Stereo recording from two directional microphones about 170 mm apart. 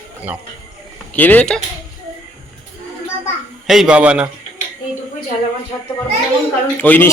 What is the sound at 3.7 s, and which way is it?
Speech, 5° right (ahead or behind).